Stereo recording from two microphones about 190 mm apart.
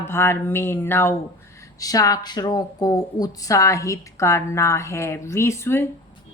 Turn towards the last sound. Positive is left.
turn(degrees=15)  # may be behind; listen again after turning